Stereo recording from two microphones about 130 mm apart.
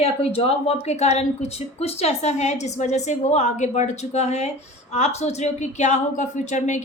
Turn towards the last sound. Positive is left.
turn(degrees=65)  # may be behind; listen again after turning